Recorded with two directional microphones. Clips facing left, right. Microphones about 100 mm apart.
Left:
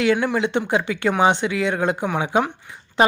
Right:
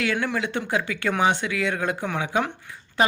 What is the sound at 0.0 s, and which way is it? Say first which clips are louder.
A woman's voice: left 6 dB; 25° left (ahead or behind).